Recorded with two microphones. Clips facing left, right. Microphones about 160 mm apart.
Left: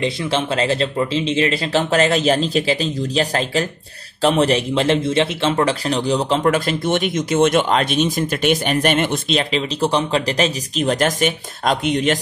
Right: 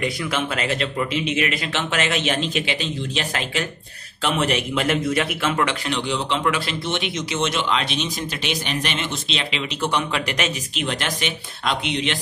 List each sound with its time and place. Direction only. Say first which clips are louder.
0.0 s a man's voice: left 4 dB; 25° left (ahead or behind); by 12.2 s 45° left (ahead or behind)